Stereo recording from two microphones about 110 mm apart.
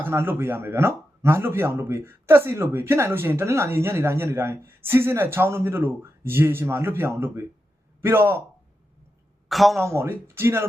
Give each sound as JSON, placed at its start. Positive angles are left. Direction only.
{"t": 0.0, "sound": "speech", "side_deg": -20}
{"t": 9.5, "sound": "speech", "side_deg": 0}
{"t": 9.8, "sound": "speech", "side_deg": -20}